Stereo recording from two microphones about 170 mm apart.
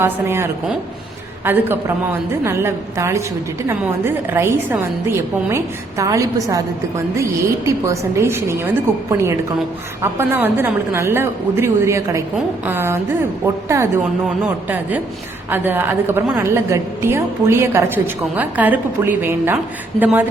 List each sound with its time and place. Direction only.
0.0 s a woman's voice: 15° right (ahead or behind)
19.9 s speech: 5° left (ahead or behind)